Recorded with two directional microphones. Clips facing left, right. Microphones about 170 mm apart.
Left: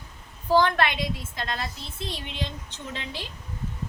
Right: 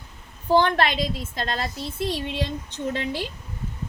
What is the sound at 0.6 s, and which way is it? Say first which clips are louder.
Speech: right 2 dB; 35° right (ahead or behind).